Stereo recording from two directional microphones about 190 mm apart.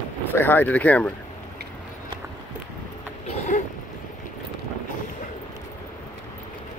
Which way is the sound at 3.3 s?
40° left (ahead or behind).